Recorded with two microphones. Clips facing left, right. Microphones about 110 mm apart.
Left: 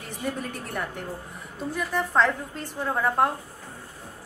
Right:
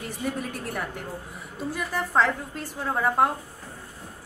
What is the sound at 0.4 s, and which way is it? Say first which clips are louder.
A woman's voice: even; 5° right (ahead or behind).